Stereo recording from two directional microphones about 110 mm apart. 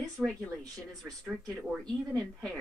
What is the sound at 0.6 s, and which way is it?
Speech, 35° right (ahead or behind).